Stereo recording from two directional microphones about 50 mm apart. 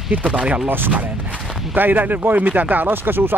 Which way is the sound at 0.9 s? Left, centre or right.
Right.